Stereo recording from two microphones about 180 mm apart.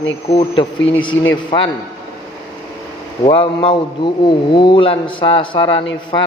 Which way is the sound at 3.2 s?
30° left (ahead or behind).